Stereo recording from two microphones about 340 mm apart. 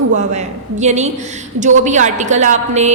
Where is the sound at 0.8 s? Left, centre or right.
Centre.